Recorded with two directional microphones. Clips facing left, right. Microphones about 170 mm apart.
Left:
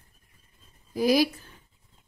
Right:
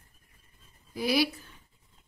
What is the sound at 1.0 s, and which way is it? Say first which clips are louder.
Speech: left 5 dB; 40° left (ahead or behind).